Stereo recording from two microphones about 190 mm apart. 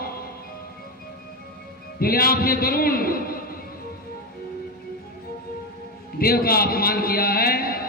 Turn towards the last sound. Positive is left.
turn(degrees=50)  # may be behind; listen again after turning